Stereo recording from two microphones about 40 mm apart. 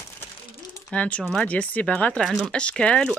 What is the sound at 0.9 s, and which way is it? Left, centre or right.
Speech, left.